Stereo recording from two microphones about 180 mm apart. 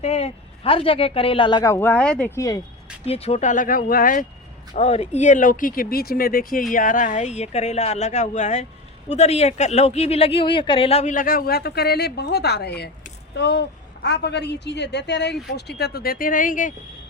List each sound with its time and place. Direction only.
0.0 s a man's voice: 35° left (ahead or behind); by 2.6 s 15° left (ahead or behind)
3.1 s speech: 35° left (ahead or behind)
4.7 s a woman's voice: 35° left (ahead or behind); by 15.4 s 70° left (ahead or behind)
15.8 s speech: 60° left (ahead or behind)